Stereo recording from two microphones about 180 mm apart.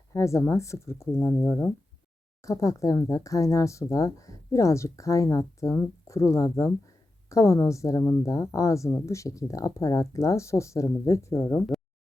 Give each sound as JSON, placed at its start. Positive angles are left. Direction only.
{"t": 0.1, "sound": "speech", "side_deg": 15}